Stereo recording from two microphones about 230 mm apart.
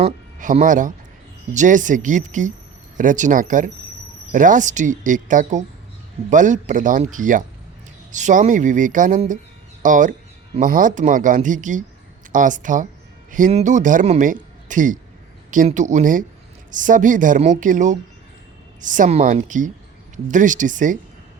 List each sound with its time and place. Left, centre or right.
0.0 s speech: right